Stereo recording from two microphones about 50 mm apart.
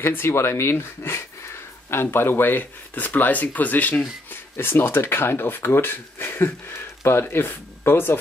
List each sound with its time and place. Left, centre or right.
0.3 s speech: left
4.3 s speech: left